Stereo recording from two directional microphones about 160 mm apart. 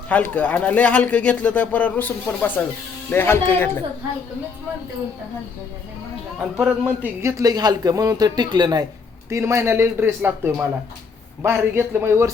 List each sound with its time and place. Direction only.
0.1 s a man's voice: 10° left (ahead or behind)
6.4 s a man's voice: 10° right (ahead or behind)